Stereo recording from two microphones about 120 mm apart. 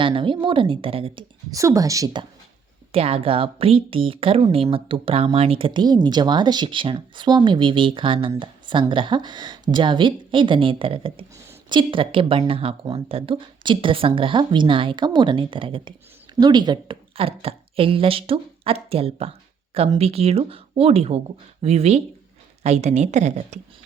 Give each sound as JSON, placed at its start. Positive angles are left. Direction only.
{"t": 0.0, "sound": "speech", "side_deg": -45}
{"t": 1.5, "sound": "a woman's voice", "side_deg": -30}
{"t": 2.9, "sound": "a woman's voice", "side_deg": -55}